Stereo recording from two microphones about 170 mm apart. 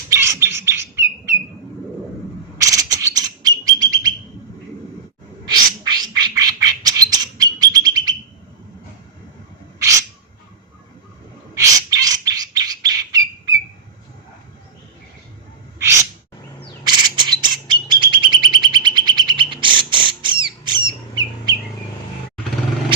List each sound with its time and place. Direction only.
0.1 s bird: 15° right (ahead or behind)
2.6 s bird: 20° right (ahead or behind)
5.5 s bird: 25° right (ahead or behind)
9.7 s owl: 20° right (ahead or behind)
11.5 s bird: 20° right (ahead or behind)
16.8 s bird: 25° right (ahead or behind)